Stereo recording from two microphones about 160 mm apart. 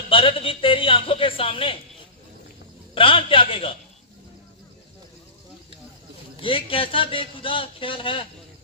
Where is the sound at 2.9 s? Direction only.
35° left (ahead or behind).